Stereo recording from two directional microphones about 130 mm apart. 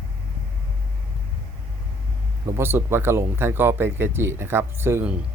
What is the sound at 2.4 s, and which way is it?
Speech, 15° right (ahead or behind).